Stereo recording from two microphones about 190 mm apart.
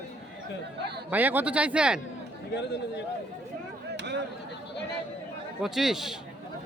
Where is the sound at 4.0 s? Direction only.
65° right (ahead or behind).